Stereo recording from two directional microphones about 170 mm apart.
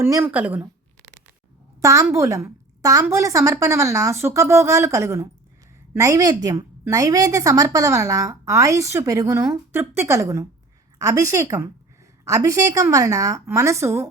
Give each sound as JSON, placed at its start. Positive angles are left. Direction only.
{"t": 0.0, "sound": "a woman's voice", "side_deg": -15}
{"t": 1.8, "sound": "a woman's voice", "side_deg": -20}